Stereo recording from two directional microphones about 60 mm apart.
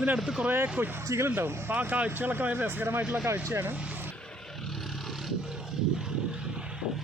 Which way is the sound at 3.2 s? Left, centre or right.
Right.